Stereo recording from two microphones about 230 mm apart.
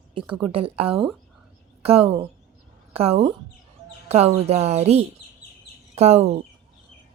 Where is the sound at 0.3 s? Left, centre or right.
Right.